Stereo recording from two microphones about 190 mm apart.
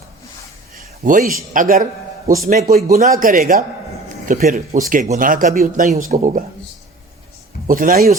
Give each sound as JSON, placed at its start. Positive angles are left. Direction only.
{"t": 0.8, "sound": "a sound", "side_deg": -45}
{"t": 1.5, "sound": "a man's voice", "side_deg": -45}
{"t": 7.7, "sound": "speech", "side_deg": -45}